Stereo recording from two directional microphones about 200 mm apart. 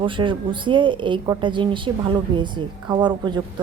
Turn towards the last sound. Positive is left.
turn(degrees=-20)  # may be behind; listen again after turning